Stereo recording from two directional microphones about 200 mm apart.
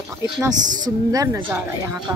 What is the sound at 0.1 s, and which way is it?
Speech, 15° right (ahead or behind).